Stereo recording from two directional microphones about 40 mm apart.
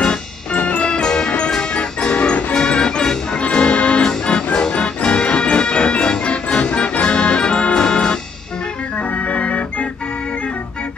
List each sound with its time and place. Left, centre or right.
0.5 s music: left
0.8 s music: left
2.5 s music: left
8.9 s organ: left